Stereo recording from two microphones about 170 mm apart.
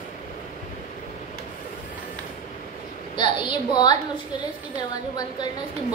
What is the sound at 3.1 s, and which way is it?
Speech, 25° left (ahead or behind).